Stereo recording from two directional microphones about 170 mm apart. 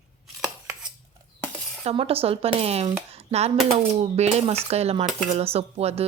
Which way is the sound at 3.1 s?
40° right (ahead or behind).